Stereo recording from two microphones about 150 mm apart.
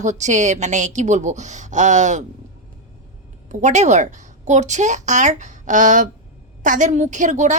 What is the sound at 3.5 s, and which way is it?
Speech, 50° right (ahead or behind).